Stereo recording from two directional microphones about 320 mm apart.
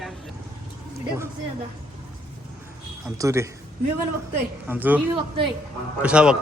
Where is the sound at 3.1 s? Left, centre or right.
Centre.